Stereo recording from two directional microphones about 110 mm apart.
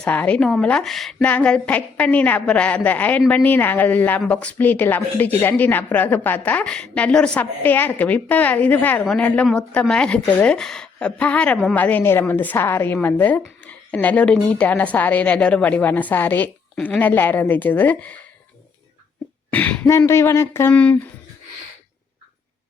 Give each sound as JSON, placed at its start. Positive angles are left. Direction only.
{"t": 0.0, "sound": "a woman's voice", "side_deg": 15}
{"t": 19.5, "sound": "a sound", "side_deg": 15}
{"t": 20.0, "sound": "speech", "side_deg": 25}